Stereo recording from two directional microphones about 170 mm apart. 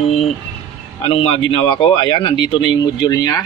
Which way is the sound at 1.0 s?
30° left (ahead or behind).